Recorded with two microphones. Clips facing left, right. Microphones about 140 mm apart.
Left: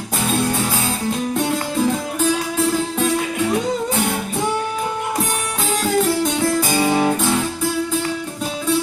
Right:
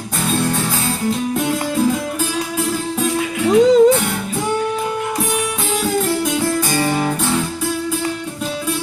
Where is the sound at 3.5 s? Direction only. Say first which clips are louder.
Right 16 dB; 90° right.